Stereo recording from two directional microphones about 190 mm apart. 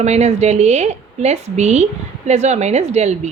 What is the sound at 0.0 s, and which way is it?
A woman's voice, 35° right (ahead or behind).